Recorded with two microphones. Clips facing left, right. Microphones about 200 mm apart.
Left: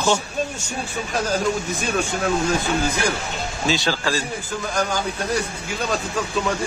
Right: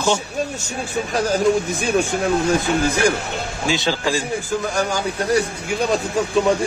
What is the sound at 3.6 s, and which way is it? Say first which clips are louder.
Speech: right 1 dB; 15° right (ahead or behind).